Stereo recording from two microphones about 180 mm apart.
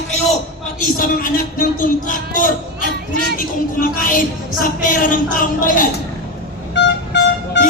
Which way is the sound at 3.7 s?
50° left (ahead or behind).